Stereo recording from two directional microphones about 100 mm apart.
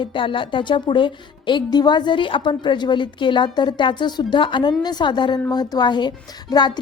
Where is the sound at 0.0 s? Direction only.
60° left (ahead or behind).